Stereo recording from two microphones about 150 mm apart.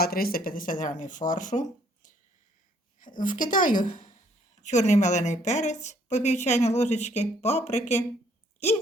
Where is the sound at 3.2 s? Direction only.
60° left (ahead or behind).